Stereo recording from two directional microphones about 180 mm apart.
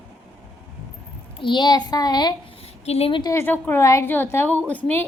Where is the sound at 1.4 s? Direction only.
25° left (ahead or behind).